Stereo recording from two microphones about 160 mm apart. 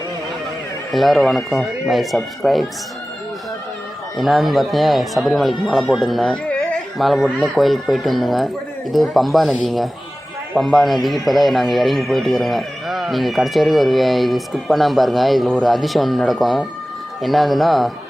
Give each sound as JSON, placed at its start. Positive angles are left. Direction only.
{"t": 0.9, "sound": "a man's voice", "side_deg": 0}
{"t": 4.2, "sound": "a man's voice", "side_deg": 0}